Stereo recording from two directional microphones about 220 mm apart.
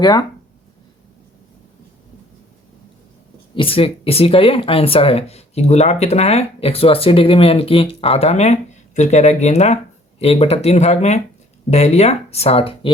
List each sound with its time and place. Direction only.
0.0 s speech: 20° left (ahead or behind)
3.5 s speech: 25° left (ahead or behind)